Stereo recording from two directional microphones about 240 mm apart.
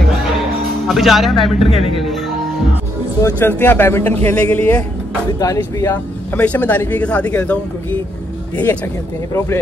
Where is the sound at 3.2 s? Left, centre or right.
Centre.